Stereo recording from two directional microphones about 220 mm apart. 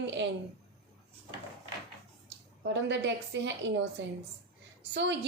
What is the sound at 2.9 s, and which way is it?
Speech, 55° right (ahead or behind).